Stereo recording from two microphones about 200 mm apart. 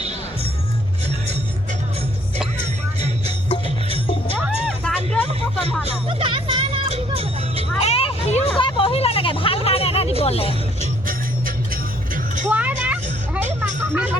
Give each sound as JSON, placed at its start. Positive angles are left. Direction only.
{"t": 3.5, "sound": "music", "side_deg": 25}
{"t": 4.4, "sound": "music", "side_deg": 0}
{"t": 5.8, "sound": "music", "side_deg": -30}
{"t": 7.8, "sound": "a sound", "side_deg": 30}
{"t": 10.8, "sound": "vehicle", "side_deg": -45}
{"t": 12.5, "sound": "music", "side_deg": -10}